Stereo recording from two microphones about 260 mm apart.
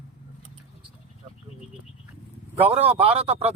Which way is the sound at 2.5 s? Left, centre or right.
Right.